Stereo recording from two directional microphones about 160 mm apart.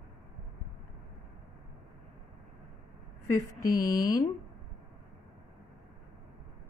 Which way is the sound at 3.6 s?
60° left (ahead or behind).